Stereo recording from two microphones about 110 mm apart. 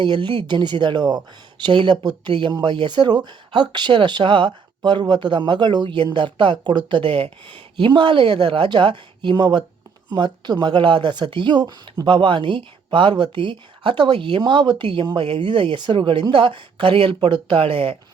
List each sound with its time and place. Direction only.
0.0 s speech: 45° right (ahead or behind)